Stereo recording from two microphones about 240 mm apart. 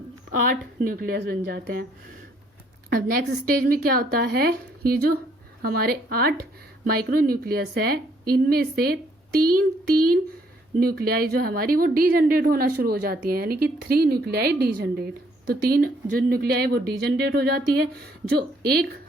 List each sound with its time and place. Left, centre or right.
0.3 s a woman's voice: right
2.9 s a woman's voice: right